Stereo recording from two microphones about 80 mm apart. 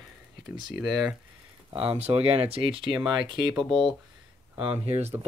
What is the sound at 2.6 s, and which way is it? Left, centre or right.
Speech, right.